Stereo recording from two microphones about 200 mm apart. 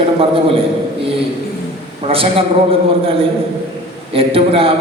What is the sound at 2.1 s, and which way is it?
Speech, 25° right (ahead or behind).